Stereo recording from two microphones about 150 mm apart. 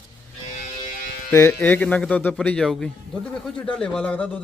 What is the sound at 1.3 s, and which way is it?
A man's voice, 15° left (ahead or behind).